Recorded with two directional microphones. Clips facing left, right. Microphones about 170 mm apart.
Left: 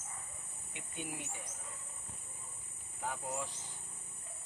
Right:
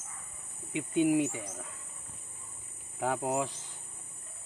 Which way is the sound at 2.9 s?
85° right.